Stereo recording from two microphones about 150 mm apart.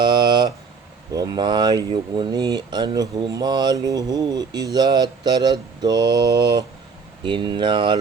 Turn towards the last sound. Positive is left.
turn(degrees=-30)  # may be behind; listen again after turning